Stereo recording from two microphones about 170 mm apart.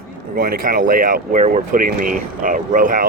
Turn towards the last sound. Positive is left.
turn(degrees=-55)  # may be behind; listen again after turning